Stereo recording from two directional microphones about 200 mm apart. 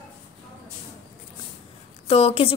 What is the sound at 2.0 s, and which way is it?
Speech, 30° left (ahead or behind).